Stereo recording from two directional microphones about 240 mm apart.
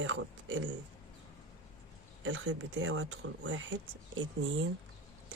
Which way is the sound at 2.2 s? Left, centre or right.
Right.